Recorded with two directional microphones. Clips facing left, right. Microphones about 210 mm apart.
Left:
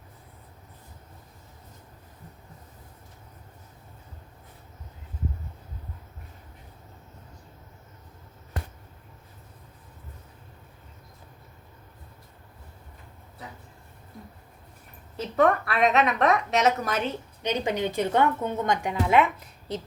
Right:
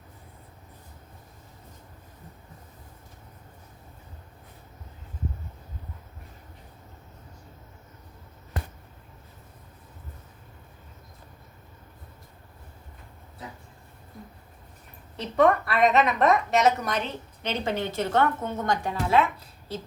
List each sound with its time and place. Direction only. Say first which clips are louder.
15.1 s a woman's voice: right 1 dB; centre (ahead or behind)
17.4 s a woman's voice: left 2 dB; 15° left (ahead or behind)